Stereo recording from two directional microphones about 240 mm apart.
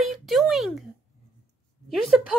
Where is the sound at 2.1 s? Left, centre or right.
Centre.